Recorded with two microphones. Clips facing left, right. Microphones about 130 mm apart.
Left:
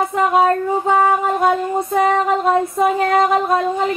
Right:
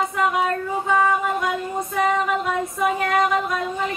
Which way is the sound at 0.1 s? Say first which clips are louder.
Left 6 dB; 35° left (ahead or behind).